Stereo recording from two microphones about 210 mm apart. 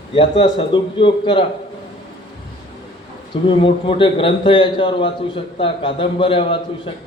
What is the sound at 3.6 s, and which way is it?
A man's voice, 25° left (ahead or behind).